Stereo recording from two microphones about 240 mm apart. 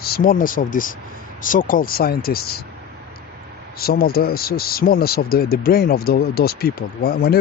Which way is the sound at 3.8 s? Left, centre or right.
Left.